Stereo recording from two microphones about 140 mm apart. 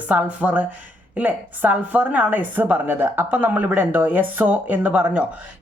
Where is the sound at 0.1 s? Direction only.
10° right (ahead or behind).